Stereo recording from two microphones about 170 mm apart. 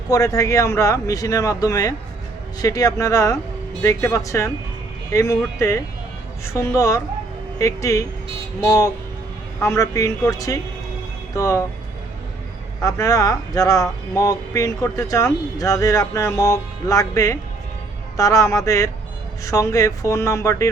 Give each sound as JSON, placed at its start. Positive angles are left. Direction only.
{"t": 0.1, "sound": "speech", "side_deg": 20}
{"t": 9.6, "sound": "speech", "side_deg": 20}
{"t": 12.8, "sound": "speech", "side_deg": 20}